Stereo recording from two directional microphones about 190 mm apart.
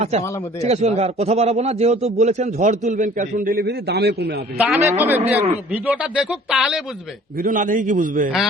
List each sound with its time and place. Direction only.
0.6 s a man's voice: 35° right (ahead or behind); by 4.4 s 60° right (ahead or behind)
4.8 s a man's voice: 15° right (ahead or behind)
5.2 s a man's voice: 35° right (ahead or behind)
5.7 s speech: 5° right (ahead or behind)
7.3 s a man's voice: 45° right (ahead or behind)